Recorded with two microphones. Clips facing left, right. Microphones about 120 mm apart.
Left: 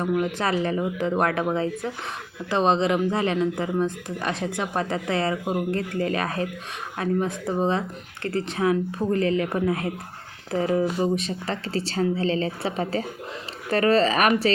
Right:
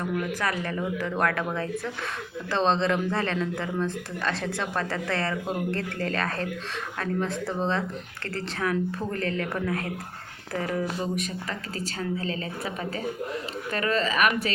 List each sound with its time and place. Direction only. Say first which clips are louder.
0.0 s a woman's voice: left 4 dB; 25° left (ahead or behind)